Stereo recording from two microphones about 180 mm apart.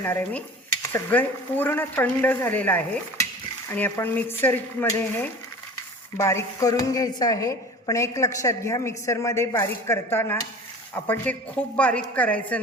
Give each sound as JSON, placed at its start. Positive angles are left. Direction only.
{"t": 0.0, "sound": "a woman's voice", "side_deg": 10}